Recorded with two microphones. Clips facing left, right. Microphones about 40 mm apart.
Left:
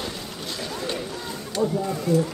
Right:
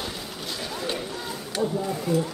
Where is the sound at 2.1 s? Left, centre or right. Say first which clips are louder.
Left 3 dB; centre.